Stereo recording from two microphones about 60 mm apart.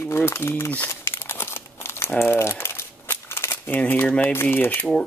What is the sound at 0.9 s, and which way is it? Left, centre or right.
Crumpling, left.